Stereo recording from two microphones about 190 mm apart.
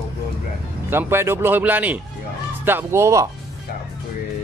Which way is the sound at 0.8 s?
10° right (ahead or behind).